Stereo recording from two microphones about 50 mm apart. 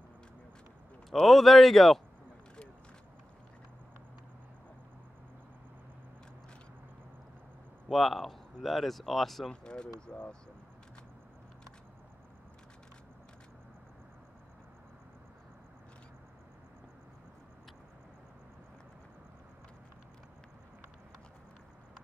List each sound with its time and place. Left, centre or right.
1.2 s speech: centre
7.9 s speech: centre
9.5 s speech: centre